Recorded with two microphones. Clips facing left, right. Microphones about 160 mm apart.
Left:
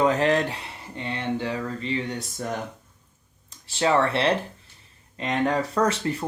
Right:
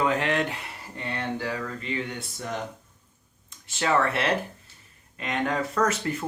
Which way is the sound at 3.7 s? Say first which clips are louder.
Left 3 dB; 30° left (ahead or behind).